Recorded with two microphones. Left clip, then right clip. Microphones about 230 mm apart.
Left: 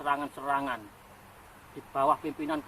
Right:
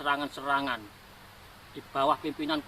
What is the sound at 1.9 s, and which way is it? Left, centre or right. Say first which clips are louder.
Speech: even; right.